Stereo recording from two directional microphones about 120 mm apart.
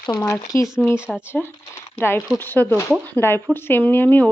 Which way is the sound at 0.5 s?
20° left (ahead or behind).